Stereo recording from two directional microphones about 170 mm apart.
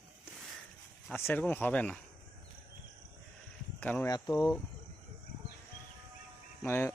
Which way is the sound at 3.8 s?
10° left (ahead or behind).